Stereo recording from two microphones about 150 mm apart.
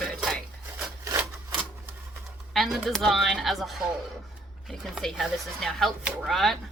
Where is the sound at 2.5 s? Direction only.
Centre (ahead or behind).